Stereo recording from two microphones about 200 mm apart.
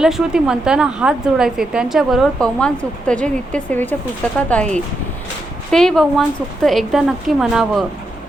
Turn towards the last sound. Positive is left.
turn(degrees=-5)  # may be behind; listen again after turning